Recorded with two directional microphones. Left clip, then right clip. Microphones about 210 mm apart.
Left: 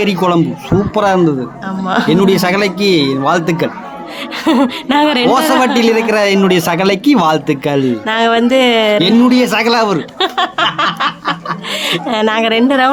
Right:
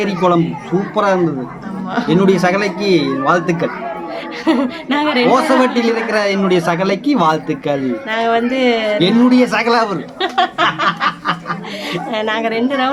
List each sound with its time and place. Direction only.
0.0 s a man's voice: 50° left (ahead or behind)
4.4 s a man's voice: 40° left (ahead or behind)